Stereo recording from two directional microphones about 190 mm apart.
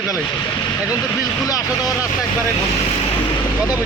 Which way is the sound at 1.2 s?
20° left (ahead or behind).